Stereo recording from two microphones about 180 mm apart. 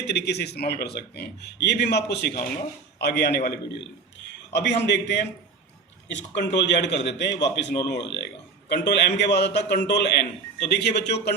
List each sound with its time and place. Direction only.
0.0 s a man's voice: 65° left (ahead or behind)
4.3 s a man's voice: 75° left (ahead or behind)